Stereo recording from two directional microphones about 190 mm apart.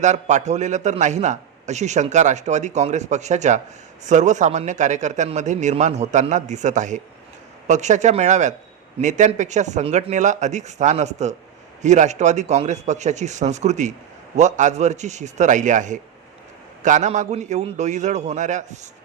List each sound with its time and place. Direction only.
0.0 s a man's voice: 40° right (ahead or behind)